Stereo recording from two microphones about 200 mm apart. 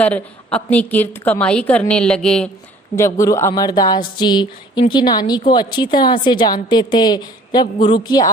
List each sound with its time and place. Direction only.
0.0 s a woman's voice: 5° left (ahead or behind)